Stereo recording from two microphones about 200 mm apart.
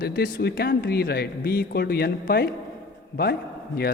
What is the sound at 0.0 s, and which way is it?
Speech, 50° left (ahead or behind).